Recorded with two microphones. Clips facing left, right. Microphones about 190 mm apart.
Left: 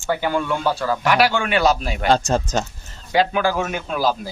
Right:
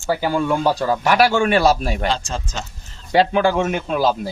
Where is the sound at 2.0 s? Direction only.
45° left (ahead or behind).